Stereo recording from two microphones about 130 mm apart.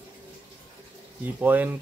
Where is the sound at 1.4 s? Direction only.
15° right (ahead or behind).